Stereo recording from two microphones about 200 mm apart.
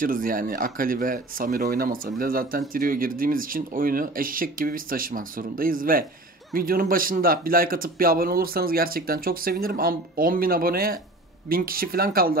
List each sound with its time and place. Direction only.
0.0 s a man's voice: 45° right (ahead or behind)